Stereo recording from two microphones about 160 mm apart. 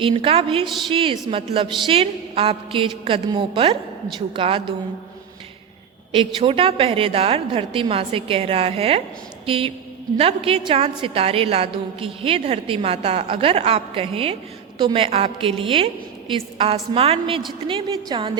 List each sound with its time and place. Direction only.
0.0 s a woman's voice: 35° right (ahead or behind)
6.1 s a woman's voice: 35° right (ahead or behind)